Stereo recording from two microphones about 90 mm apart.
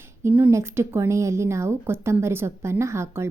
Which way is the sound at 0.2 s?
25° right (ahead or behind).